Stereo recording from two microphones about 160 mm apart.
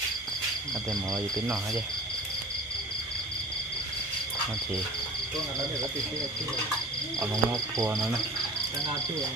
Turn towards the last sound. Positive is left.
turn(degrees=-20)  # may be behind; listen again after turning